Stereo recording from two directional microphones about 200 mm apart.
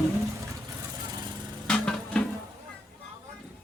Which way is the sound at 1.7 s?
5° left (ahead or behind).